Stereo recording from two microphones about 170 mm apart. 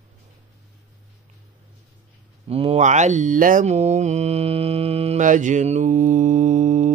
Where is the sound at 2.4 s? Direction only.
35° right (ahead or behind).